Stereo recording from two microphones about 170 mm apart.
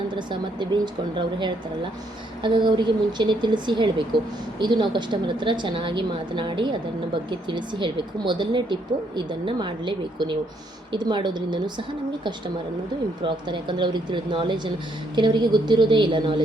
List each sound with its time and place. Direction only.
0.2 s a woman's voice: 25° right (ahead or behind)